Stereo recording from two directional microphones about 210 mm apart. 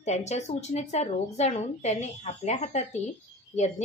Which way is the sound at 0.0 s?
30° left (ahead or behind).